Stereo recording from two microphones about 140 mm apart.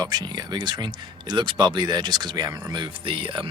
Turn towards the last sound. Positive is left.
turn(degrees=-35)  # may be behind; listen again after turning